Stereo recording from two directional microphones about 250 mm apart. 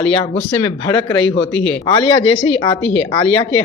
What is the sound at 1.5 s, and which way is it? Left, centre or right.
Speech, left.